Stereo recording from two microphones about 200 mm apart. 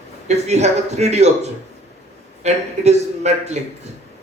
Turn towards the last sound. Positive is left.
turn(degrees=-35)  # may be behind; listen again after turning